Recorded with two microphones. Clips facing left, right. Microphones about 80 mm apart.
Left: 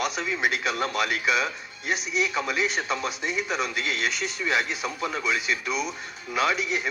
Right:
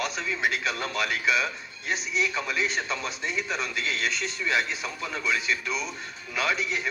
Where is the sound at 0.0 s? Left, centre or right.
Centre.